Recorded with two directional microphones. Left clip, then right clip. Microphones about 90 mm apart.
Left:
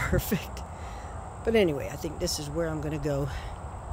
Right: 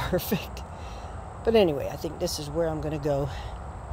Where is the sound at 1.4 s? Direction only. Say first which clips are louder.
Right 3 dB; 20° left (ahead or behind); by 3.3 s 40° left (ahead or behind).